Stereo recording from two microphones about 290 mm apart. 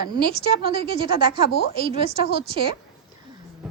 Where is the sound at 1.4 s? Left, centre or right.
Left.